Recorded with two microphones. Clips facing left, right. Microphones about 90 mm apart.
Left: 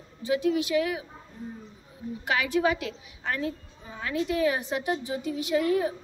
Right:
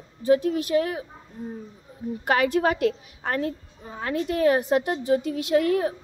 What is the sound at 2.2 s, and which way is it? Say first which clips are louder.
A woman's voice: right 4 dB; 50° right (ahead or behind).